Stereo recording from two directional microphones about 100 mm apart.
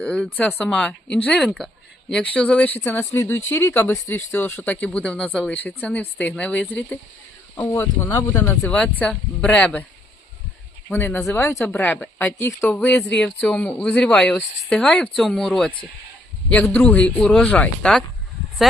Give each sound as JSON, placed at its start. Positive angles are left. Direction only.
{"t": 0.0, "sound": "speech", "side_deg": 10}
{"t": 8.7, "sound": "speech", "side_deg": 10}
{"t": 10.8, "sound": "speech", "side_deg": 20}
{"t": 11.8, "sound": "speech", "side_deg": 15}
{"t": 12.4, "sound": "speech", "side_deg": 30}
{"t": 12.6, "sound": "speech", "side_deg": 15}